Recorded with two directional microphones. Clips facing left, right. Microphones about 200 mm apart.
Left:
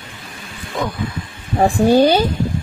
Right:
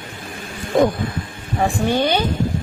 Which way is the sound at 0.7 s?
50° right (ahead or behind).